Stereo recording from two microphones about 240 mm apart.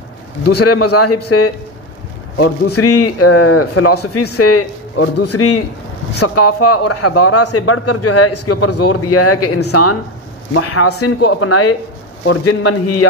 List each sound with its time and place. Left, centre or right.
0.7 s speech: left